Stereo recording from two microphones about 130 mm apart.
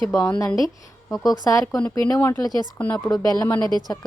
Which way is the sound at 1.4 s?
25° left (ahead or behind).